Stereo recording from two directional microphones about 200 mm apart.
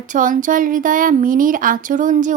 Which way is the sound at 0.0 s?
40° right (ahead or behind).